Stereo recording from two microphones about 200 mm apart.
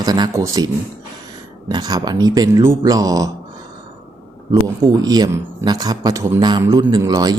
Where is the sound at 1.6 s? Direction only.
20° right (ahead or behind).